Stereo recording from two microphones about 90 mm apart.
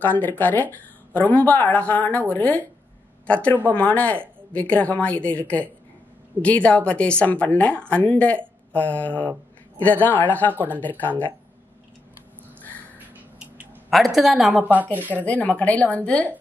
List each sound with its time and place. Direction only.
0.0 s speech: 20° left (ahead or behind)
3.7 s a woman's voice: 15° left (ahead or behind)
10.5 s speech: 20° right (ahead or behind)
10.8 s speech: 20° left (ahead or behind)
13.8 s a woman's voice: centre (ahead or behind)
14.6 s speech: 20° right (ahead or behind)
15.1 s a woman's voice: 15° left (ahead or behind)